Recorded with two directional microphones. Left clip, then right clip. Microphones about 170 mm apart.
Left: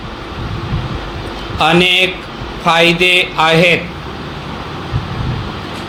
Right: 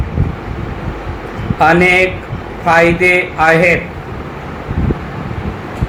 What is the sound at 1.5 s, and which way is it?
Speech, 50° left (ahead or behind).